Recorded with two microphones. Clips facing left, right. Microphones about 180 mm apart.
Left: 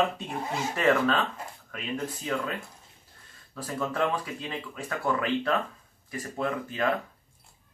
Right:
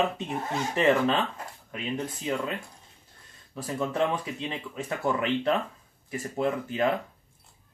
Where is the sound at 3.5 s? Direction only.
20° right (ahead or behind).